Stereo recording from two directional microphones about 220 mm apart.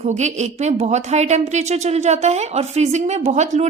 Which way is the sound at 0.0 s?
30° right (ahead or behind).